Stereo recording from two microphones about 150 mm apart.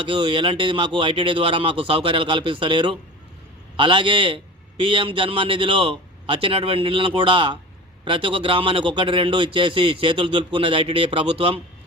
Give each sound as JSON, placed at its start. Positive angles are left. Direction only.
{"t": 0.0, "sound": "a man's voice", "side_deg": -35}